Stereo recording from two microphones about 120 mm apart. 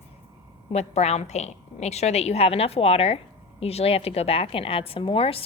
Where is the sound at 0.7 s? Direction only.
65° left (ahead or behind).